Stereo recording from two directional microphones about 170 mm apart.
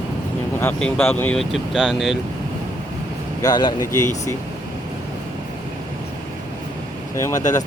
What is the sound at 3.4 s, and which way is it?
Speech, 25° left (ahead or behind).